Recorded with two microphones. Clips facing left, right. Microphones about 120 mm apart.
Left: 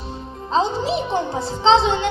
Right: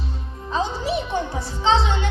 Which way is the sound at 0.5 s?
25° left (ahead or behind).